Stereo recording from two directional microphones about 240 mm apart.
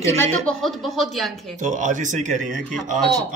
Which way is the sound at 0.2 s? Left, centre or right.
Centre.